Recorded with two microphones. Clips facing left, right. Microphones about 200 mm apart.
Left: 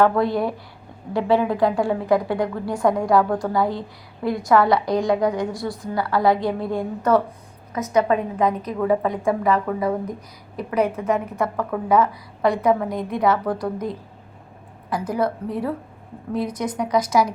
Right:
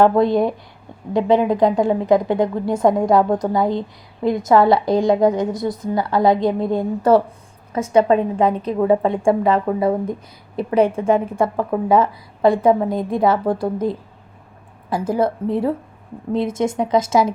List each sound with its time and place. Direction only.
0.0 s speech: 25° right (ahead or behind)